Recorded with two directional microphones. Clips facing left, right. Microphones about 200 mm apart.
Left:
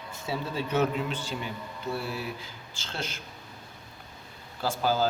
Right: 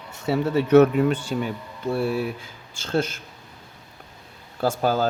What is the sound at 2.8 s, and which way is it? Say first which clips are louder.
Speech: right 13 dB; 50° right (ahead or behind).